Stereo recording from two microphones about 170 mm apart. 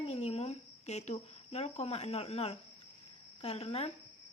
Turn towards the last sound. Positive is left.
turn(degrees=35)  # may be behind; listen again after turning